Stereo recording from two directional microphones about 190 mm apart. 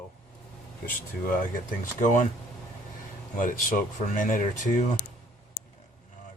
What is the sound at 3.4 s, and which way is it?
Speech, 45° left (ahead or behind).